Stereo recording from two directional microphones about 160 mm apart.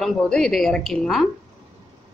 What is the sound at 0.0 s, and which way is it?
A woman's voice, centre (ahead or behind).